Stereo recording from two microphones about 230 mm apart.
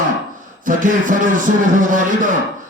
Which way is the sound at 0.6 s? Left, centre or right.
Right.